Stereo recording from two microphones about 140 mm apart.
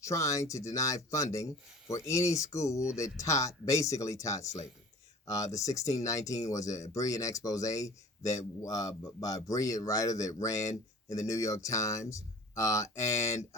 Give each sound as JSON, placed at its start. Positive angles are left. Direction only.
{"t": 0.0, "sound": "speech", "side_deg": 20}